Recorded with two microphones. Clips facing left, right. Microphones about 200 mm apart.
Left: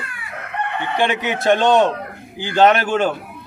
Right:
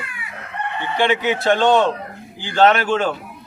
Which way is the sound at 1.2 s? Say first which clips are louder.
Even; 20° left (ahead or behind).